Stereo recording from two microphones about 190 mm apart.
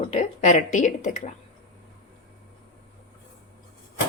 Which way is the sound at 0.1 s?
35° left (ahead or behind).